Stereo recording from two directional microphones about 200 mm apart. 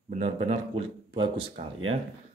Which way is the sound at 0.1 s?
30° right (ahead or behind).